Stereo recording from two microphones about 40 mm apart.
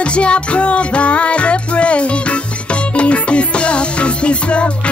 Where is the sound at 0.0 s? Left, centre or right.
Left.